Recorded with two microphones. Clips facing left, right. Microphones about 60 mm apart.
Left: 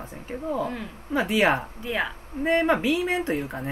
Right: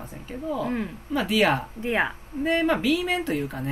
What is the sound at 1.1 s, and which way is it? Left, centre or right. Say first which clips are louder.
Speech: left 1 dB; centre.